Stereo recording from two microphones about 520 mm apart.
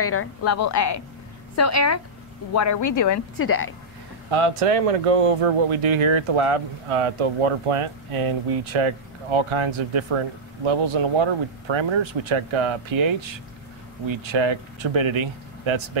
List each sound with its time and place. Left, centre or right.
0.0 s a woman's voice: left
4.3 s speech: right